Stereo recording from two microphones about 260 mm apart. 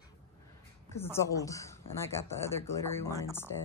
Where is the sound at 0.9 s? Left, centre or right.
Centre.